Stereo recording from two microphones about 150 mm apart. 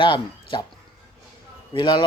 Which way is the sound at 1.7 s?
30° left (ahead or behind).